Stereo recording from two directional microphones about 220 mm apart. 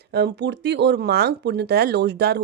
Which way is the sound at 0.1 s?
50° right (ahead or behind).